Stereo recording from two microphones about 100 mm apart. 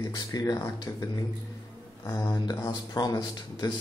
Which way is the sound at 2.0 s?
35° left (ahead or behind).